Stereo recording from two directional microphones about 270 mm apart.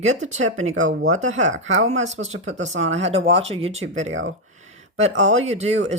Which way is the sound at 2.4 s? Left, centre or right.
Right.